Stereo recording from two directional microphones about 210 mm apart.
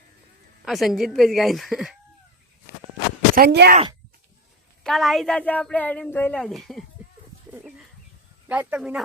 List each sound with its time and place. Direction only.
0.6 s speech: centre (ahead or behind)
3.3 s speech: 50° right (ahead or behind)
4.8 s speech: centre (ahead or behind)
8.4 s speech: 5° right (ahead or behind)